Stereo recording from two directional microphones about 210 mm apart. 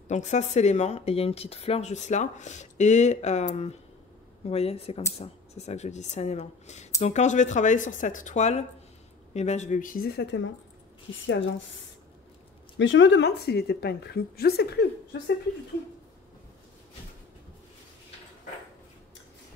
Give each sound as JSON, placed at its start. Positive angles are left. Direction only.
{"t": 0.1, "sound": "speech", "side_deg": 35}
{"t": 12.7, "sound": "a woman's voice", "side_deg": 60}